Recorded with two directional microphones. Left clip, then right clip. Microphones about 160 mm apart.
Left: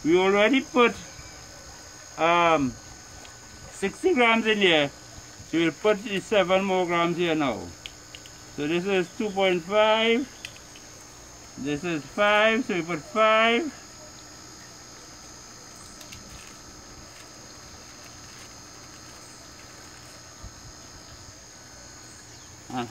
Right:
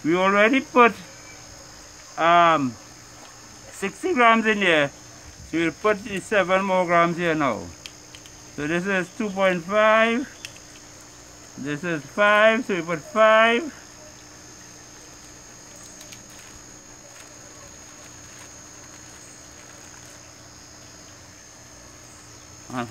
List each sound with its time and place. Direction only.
0.1 s speech: 35° right (ahead or behind)
2.1 s speech: 40° right (ahead or behind)
3.8 s speech: 40° right (ahead or behind)
8.5 s speech: 40° right (ahead or behind)
11.6 s speech: 45° right (ahead or behind)